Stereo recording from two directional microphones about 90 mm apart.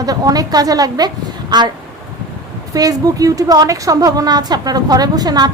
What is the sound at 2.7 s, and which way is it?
A woman's voice, 40° right (ahead or behind).